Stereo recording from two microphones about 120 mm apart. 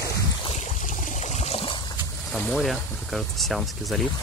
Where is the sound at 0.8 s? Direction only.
70° left (ahead or behind); by 1.8 s 55° left (ahead or behind).